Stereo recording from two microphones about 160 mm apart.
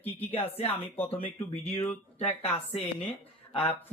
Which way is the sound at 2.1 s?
40° left (ahead or behind).